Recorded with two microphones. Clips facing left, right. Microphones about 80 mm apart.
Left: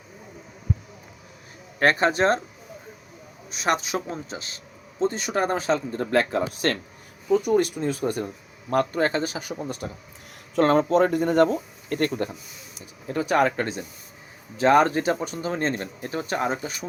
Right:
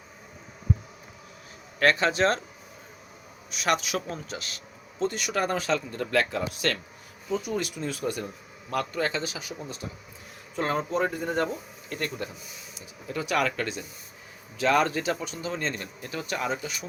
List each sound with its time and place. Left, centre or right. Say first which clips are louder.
1.8 s speech: left 2 dB; left
3.5 s speech: left 2 dB; left
7.3 s speech: left 9 dB; left
10.5 s speech: left 9 dB; left
11.5 s speech: left 8 dB; left